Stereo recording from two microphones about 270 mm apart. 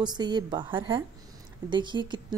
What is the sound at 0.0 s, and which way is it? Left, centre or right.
A woman's voice, centre.